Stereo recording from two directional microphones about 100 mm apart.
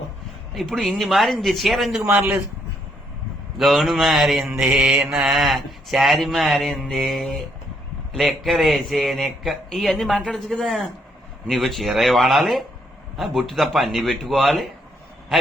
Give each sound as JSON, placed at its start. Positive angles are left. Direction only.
{"t": 0.5, "sound": "mantra", "side_deg": 0}
{"t": 2.0, "sound": "a man's voice", "side_deg": -20}
{"t": 3.6, "sound": "mantra", "side_deg": 0}